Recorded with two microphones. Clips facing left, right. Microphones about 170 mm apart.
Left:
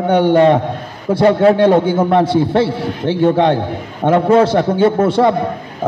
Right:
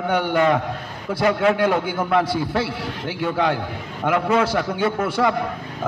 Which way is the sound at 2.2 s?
25° left (ahead or behind).